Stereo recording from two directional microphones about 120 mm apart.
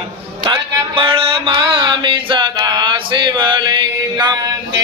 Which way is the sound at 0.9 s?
50° right (ahead or behind).